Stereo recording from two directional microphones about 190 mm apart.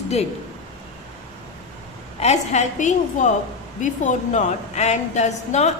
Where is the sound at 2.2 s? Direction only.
35° left (ahead or behind).